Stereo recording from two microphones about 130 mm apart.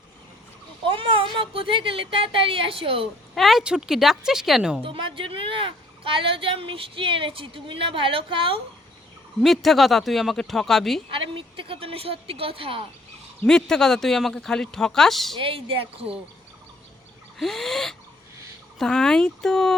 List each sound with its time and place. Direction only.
0.9 s speech: 40° right (ahead or behind)
3.3 s speech: centre (ahead or behind)
4.8 s speech: 40° right (ahead or behind)
9.4 s speech: centre (ahead or behind)
11.1 s speech: 45° right (ahead or behind)
13.4 s speech: 5° left (ahead or behind)
15.4 s speech: 45° right (ahead or behind)
17.3 s speech: centre (ahead or behind)